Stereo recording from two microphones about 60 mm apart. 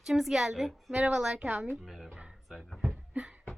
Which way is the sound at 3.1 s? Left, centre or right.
Right.